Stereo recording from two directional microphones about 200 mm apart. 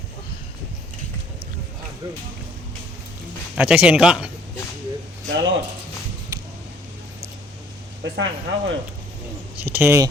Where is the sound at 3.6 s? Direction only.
5° right (ahead or behind).